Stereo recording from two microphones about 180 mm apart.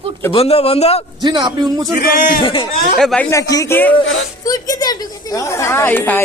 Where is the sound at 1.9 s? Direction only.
55° left (ahead or behind).